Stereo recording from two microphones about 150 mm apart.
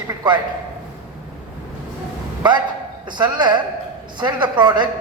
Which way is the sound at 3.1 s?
30° right (ahead or behind).